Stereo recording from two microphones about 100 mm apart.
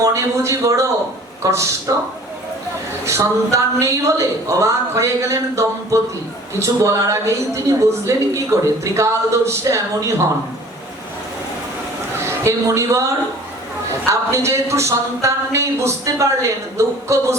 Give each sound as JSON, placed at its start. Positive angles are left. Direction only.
{"t": 0.0, "sound": "speech", "side_deg": -30}
{"t": 3.1, "sound": "a woman's voice", "side_deg": -30}
{"t": 12.2, "sound": "a woman's voice", "side_deg": -30}
{"t": 14.1, "sound": "speech", "side_deg": -30}